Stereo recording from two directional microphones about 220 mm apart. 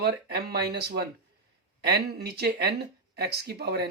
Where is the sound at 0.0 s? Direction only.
45° right (ahead or behind).